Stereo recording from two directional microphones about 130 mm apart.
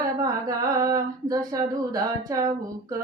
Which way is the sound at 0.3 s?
30° right (ahead or behind).